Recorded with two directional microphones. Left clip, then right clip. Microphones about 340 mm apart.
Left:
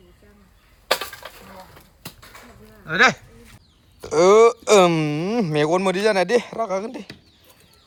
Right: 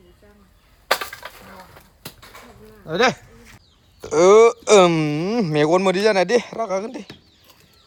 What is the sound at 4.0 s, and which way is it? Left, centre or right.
Speech, centre.